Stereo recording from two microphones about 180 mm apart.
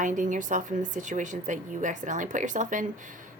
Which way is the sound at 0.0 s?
45° right (ahead or behind).